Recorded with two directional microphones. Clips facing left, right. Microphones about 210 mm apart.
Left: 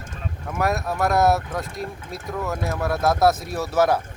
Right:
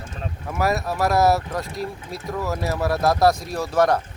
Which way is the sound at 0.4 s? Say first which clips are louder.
Right 1 dB; 5° right (ahead or behind).